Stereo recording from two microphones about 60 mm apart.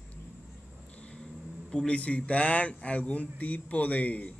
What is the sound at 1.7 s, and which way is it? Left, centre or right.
A man's voice, centre.